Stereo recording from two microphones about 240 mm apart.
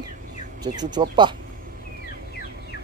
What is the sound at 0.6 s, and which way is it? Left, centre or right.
Speech, centre.